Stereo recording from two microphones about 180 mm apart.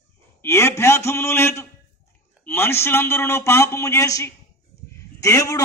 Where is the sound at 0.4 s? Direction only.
15° left (ahead or behind).